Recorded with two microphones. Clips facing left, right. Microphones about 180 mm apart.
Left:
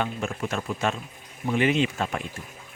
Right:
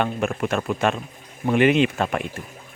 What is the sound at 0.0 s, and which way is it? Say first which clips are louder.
Speech: right 5 dB; 65° right (ahead or behind).